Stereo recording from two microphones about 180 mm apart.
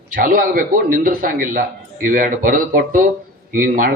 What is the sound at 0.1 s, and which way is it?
A man's voice, 50° right (ahead or behind).